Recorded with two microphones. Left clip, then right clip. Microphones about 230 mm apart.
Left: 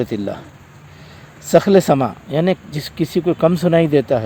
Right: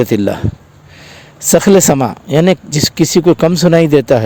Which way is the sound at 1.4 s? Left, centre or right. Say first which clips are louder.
Right 3 dB; right.